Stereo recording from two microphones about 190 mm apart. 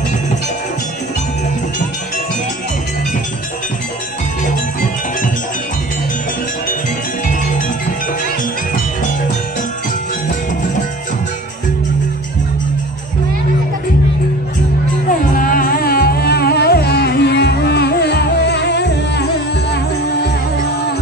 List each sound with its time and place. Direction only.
15.0 s music: 45° left (ahead or behind)